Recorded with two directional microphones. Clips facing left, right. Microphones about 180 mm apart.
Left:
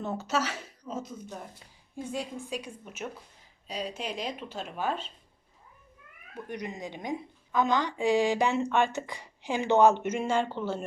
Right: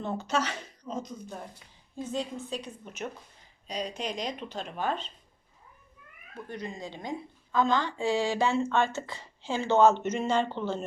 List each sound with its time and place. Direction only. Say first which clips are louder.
0.0 s a woman's voice: even; 5° left (ahead or behind)
6.3 s a woman's voice: left 1 dB; 20° left (ahead or behind)